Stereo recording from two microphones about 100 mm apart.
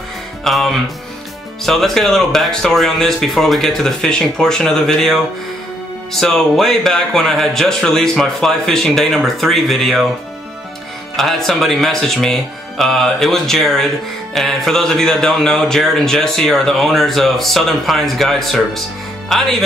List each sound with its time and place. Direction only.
0.4 s speech: 5° left (ahead or behind)
11.1 s speech: 5° left (ahead or behind)